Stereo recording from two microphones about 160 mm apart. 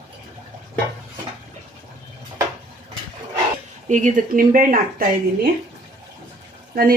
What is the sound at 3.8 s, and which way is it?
Speech, 50° right (ahead or behind).